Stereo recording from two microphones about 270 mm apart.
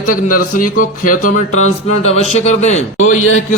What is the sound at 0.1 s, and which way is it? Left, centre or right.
Speech, left.